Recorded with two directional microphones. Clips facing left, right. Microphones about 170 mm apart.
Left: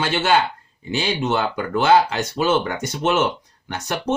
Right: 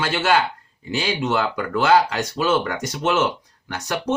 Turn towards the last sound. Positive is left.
turn(degrees=25)  # may be behind; listen again after turning